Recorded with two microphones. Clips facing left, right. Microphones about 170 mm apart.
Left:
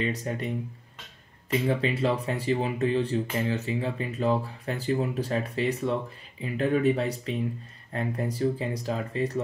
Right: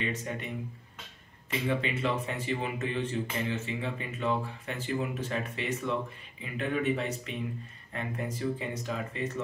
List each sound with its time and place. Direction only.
0.0 s speech: 35° left (ahead or behind)
1.7 s speech: 35° left (ahead or behind)